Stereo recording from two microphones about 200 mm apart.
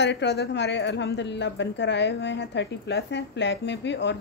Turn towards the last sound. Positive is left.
turn(degrees=60)  # may be behind; listen again after turning